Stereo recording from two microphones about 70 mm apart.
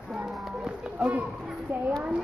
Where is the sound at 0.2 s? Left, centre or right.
Centre.